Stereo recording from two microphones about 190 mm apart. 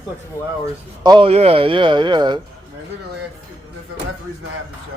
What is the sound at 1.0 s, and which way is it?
Speech, 25° right (ahead or behind).